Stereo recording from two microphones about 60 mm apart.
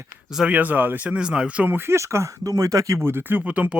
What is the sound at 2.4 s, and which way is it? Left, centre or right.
Speech, right.